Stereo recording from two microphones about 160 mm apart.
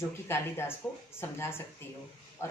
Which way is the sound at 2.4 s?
15° left (ahead or behind).